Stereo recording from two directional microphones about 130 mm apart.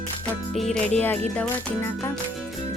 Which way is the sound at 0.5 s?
5° left (ahead or behind).